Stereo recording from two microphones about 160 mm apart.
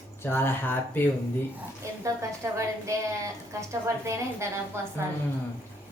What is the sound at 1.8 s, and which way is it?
A woman's voice, 20° right (ahead or behind).